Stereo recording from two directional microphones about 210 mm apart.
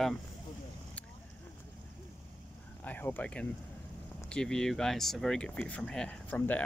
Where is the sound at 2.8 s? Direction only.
10° left (ahead or behind).